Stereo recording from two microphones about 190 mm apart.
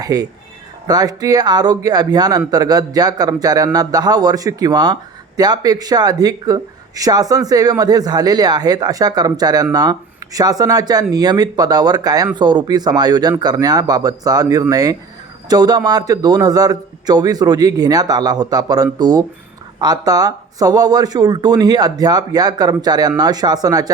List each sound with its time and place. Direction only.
0.0 s speech: 20° right (ahead or behind)